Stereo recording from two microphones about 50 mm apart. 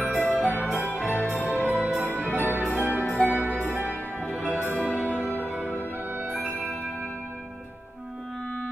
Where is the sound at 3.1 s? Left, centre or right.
Left.